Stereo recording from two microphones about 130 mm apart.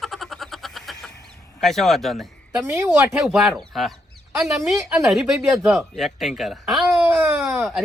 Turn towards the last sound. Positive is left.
turn(degrees=0)  # may be behind; listen again after turning